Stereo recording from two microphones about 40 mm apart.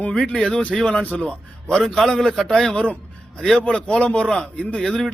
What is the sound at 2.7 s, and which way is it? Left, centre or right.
Speech, left.